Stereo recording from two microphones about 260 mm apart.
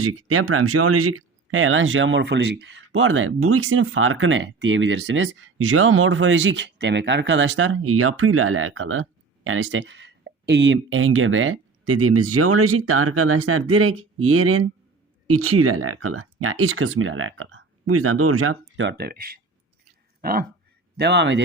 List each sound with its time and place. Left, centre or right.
0.0 s speech: right